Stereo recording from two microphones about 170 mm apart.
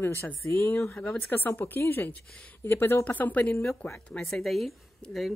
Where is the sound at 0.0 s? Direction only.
15° left (ahead or behind).